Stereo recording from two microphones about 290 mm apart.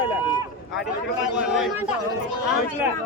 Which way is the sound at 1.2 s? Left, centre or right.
Centre.